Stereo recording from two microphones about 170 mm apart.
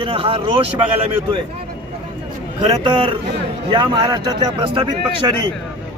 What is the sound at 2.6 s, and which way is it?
Speech, 30° right (ahead or behind).